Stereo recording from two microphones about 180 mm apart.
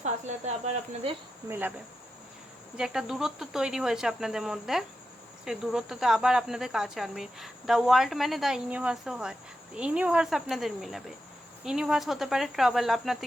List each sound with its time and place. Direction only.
0.0 s speech: 40° right (ahead or behind)
1.5 s speech: 10° right (ahead or behind)
2.7 s cricket: 5° right (ahead or behind)